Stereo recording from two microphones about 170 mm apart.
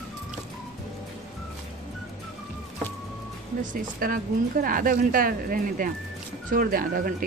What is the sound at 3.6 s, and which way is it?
Speech, 55° right (ahead or behind).